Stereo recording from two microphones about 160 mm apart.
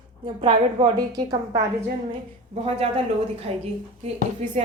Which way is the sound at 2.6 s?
40° right (ahead or behind).